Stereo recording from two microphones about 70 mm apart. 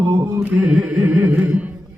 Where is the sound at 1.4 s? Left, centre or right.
Right.